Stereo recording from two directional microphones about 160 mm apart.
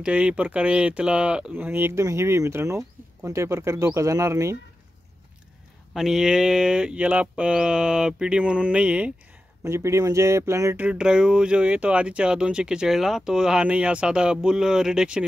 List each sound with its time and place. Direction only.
0.0 s speech: 5° right (ahead or behind)
5.9 s speech: 5° right (ahead or behind)
10.9 s speech: 5° right (ahead or behind)